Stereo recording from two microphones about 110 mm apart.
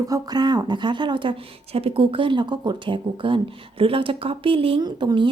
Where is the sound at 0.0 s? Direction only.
35° right (ahead or behind); by 4.8 s 55° right (ahead or behind).